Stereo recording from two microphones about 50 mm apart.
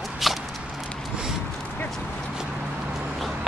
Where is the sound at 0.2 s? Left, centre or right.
Centre.